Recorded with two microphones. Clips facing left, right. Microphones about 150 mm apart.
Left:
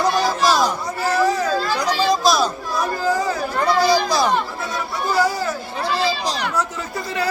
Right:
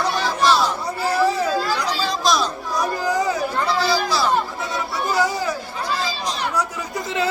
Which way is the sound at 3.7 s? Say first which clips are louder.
Left 6 dB; 15° left (ahead or behind).